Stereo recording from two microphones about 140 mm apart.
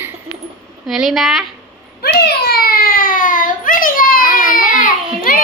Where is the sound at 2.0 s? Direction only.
90° left.